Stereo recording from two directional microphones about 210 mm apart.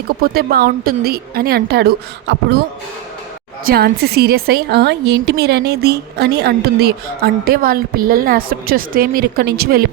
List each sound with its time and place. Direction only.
0.2 s a woman's voice: 45° right (ahead or behind)
3.7 s a woman's voice: 50° right (ahead or behind)